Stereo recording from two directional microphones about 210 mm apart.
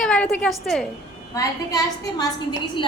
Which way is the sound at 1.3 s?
15° left (ahead or behind).